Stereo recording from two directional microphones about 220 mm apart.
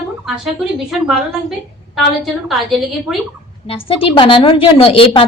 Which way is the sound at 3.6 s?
25° left (ahead or behind).